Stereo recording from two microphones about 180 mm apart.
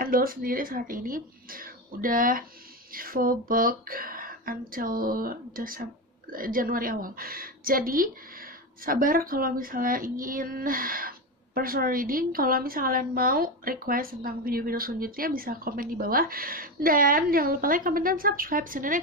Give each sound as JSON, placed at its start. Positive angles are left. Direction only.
{"t": 0.0, "sound": "a woman's voice", "side_deg": -55}